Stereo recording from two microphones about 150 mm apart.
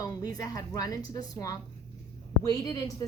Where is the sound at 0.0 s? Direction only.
25° left (ahead or behind).